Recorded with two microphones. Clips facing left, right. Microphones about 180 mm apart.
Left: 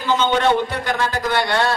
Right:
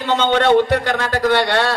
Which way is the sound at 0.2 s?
65° right (ahead or behind).